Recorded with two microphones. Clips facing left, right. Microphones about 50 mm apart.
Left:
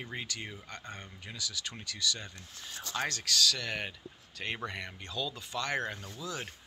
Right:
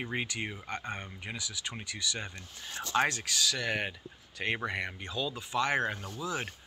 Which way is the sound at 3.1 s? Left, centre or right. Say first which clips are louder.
Left 1 dB; centre.